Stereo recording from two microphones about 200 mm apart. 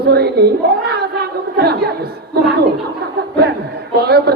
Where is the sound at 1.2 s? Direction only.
55° right (ahead or behind).